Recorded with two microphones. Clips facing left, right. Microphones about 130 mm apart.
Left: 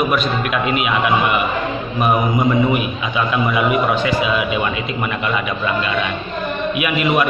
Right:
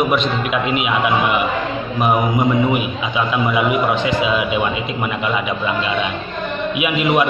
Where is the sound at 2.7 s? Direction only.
15° right (ahead or behind).